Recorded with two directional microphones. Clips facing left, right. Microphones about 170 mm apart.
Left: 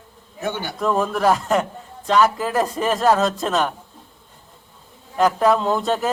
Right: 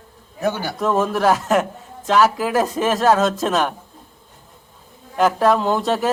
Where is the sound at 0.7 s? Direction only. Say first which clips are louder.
Left 1 dB; centre (ahead or behind).